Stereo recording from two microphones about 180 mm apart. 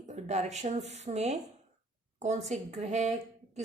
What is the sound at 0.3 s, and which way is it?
A woman's voice, 40° right (ahead or behind).